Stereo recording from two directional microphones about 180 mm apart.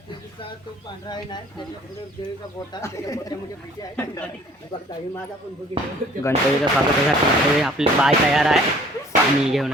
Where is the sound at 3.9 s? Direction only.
10° left (ahead or behind).